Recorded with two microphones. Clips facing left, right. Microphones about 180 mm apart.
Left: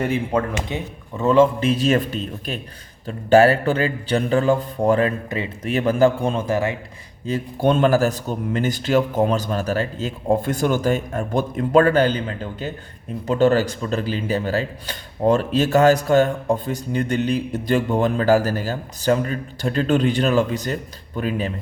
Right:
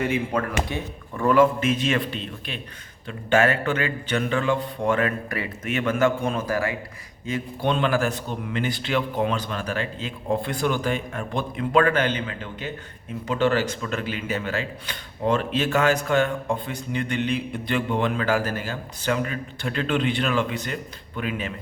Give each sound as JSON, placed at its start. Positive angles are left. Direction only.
{"t": 0.7, "sound": "speech", "side_deg": 20}
{"t": 7.3, "sound": "speech", "side_deg": 40}